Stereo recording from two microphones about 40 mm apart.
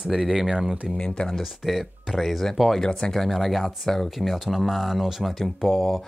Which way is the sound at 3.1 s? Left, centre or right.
Centre.